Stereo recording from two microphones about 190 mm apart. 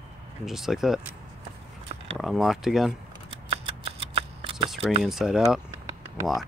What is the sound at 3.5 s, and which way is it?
Scissors, 30° right (ahead or behind).